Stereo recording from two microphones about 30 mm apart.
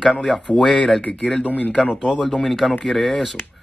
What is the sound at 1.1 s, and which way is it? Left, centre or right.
Speech, left.